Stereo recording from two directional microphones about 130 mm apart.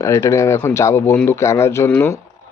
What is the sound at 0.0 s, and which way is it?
Speech, 25° left (ahead or behind).